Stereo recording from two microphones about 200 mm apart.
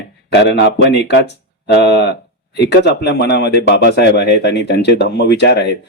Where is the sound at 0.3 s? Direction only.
60° left (ahead or behind).